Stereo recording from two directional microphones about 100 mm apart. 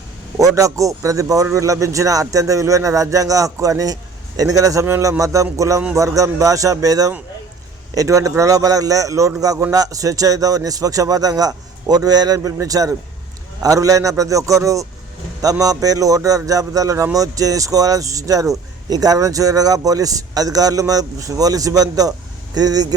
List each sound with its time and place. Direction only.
0.3 s speech: 35° right (ahead or behind)